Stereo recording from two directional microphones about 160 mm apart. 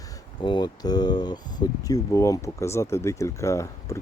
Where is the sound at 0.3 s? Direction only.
30° left (ahead or behind).